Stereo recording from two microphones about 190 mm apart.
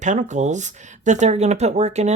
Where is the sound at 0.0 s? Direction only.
40° right (ahead or behind).